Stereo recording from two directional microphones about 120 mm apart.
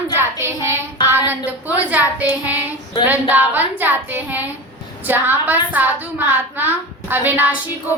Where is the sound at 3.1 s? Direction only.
15° right (ahead or behind).